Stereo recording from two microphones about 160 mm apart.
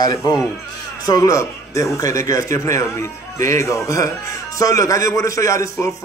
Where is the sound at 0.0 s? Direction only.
25° left (ahead or behind).